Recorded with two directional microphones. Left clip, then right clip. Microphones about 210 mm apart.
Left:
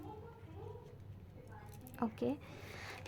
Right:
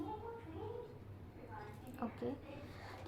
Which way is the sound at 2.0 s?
40° left (ahead or behind).